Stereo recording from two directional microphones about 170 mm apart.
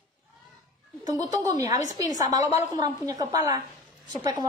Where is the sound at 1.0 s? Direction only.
20° right (ahead or behind).